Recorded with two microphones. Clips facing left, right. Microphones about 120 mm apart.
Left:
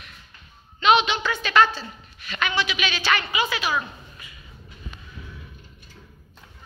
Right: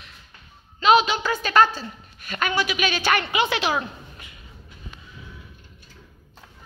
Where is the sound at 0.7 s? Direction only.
40° right (ahead or behind); by 3.7 s 65° right (ahead or behind).